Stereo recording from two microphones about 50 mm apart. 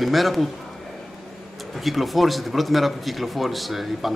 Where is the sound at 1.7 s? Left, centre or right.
Centre.